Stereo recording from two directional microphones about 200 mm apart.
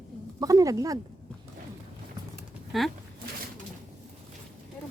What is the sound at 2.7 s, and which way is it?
Speech, centre (ahead or behind).